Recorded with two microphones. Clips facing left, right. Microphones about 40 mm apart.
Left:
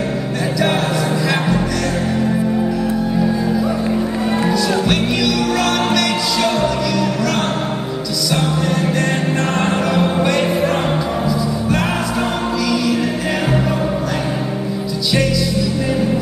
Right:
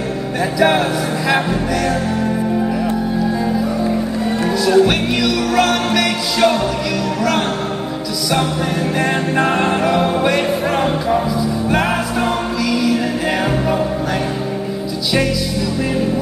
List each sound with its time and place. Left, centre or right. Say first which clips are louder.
0.6 s speech: right 4 dB; centre
4.6 s music: right 4 dB; centre
8.9 s music: right 1 dB; centre